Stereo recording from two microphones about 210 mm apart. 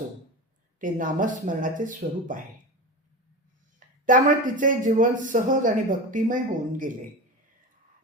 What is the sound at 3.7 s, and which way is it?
Speech, 40° right (ahead or behind).